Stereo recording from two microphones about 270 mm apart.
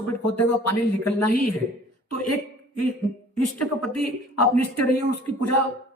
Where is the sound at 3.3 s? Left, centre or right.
Left.